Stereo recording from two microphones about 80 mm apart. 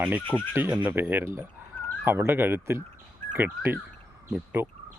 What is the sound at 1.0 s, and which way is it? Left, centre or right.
Speech, right.